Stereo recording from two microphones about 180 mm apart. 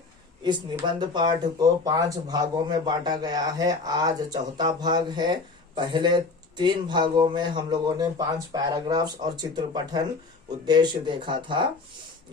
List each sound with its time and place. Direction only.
0.4 s speech: 25° right (ahead or behind)